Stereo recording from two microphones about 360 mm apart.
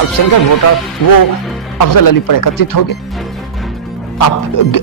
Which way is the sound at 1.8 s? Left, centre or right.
Left.